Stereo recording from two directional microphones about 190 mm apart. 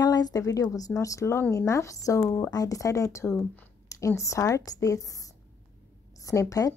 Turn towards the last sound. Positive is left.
turn(degrees=15)  # may be behind; listen again after turning